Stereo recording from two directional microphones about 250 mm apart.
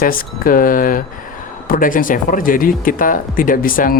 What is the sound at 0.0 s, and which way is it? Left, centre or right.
Speech, left.